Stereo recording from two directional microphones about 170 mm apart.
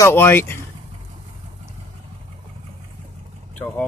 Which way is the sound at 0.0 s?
15° left (ahead or behind).